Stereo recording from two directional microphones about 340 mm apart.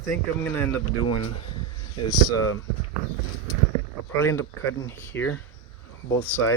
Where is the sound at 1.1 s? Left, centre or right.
Left.